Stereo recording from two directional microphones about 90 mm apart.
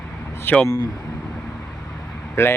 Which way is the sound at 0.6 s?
45° left (ahead or behind).